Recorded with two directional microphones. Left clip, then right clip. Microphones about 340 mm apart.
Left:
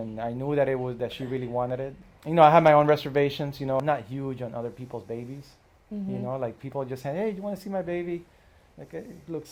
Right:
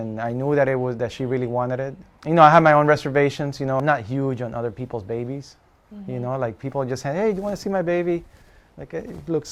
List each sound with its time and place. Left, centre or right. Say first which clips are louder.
0.2 s speech: right 6 dB; right
6.2 s speech: right 7 dB; right
8.9 s speech: right 10 dB; right